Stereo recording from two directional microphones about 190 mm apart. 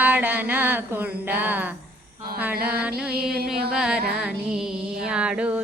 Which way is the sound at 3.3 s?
55° right (ahead or behind).